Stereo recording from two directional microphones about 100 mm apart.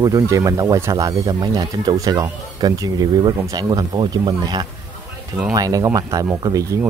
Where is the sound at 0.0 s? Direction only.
30° right (ahead or behind).